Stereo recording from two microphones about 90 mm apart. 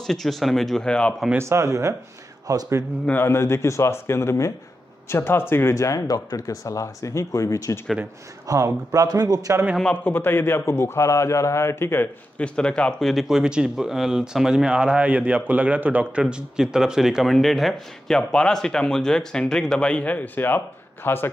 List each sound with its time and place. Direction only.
0.0 s speech: 5° left (ahead or behind)
1.4 s speech: 30° right (ahead or behind)
3.1 s a man's voice: 25° left (ahead or behind)
8.5 s speech: 35° right (ahead or behind)
10.0 s a man's voice: 25° left (ahead or behind)
12.4 s a man's voice: 10° left (ahead or behind)
13.0 s speech: centre (ahead or behind); by 21.3 s 25° left (ahead or behind)